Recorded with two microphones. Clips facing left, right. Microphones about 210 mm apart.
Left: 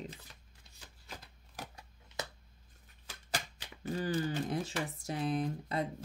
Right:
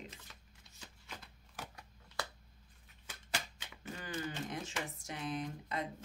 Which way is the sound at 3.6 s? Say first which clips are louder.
Left 10 dB; 35° left (ahead or behind).